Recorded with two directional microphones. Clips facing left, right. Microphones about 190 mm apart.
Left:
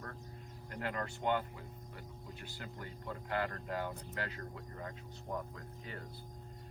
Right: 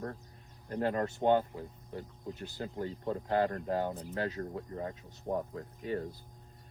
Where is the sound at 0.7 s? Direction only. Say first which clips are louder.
Right 9 dB; 40° right (ahead or behind).